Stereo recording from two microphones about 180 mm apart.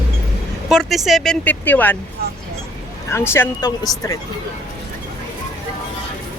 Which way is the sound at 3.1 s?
15° left (ahead or behind).